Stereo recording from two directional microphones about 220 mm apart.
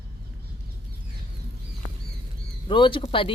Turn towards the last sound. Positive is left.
turn(degrees=25)  # may be behind; listen again after turning